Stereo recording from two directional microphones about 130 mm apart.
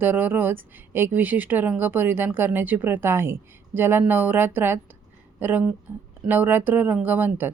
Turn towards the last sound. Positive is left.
turn(degrees=-15)  # may be behind; listen again after turning